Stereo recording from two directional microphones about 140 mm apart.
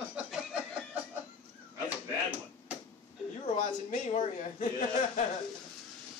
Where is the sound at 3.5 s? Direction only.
60° left (ahead or behind).